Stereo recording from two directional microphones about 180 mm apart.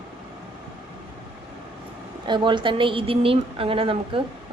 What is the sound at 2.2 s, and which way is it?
A woman's voice, 25° right (ahead or behind).